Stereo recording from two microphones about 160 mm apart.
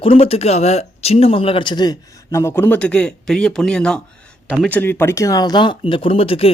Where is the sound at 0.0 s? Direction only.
35° left (ahead or behind).